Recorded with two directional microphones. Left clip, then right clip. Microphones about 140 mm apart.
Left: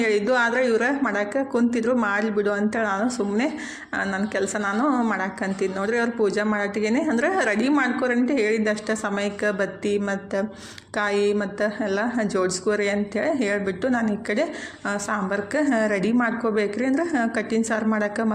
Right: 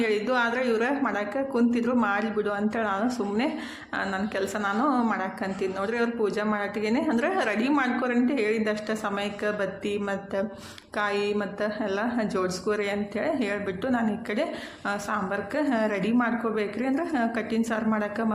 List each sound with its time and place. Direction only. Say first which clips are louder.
0.0 s a woman's voice: left 4 dB; 30° left (ahead or behind)